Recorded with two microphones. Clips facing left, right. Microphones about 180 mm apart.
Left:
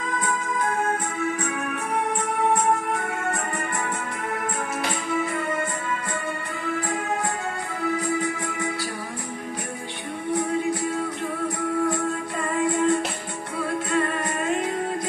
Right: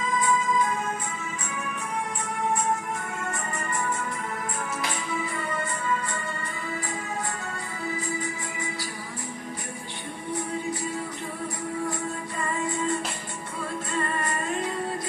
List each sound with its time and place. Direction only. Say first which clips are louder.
0.1 s music: right 4 dB; 60° left (ahead or behind)
5.1 s music: left 8 dB; 55° left (ahead or behind)
12.4 s music: left 6 dB; 70° left (ahead or behind)